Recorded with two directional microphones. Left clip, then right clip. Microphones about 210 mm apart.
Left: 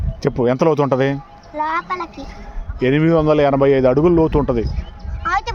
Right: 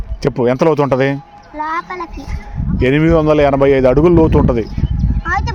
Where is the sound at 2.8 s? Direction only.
15° right (ahead or behind).